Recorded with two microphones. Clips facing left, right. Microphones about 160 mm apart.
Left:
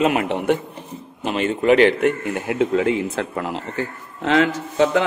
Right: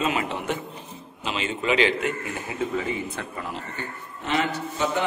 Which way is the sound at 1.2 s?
55° left (ahead or behind).